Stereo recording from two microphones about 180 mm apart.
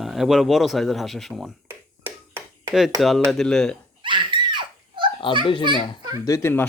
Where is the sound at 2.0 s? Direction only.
15° right (ahead or behind).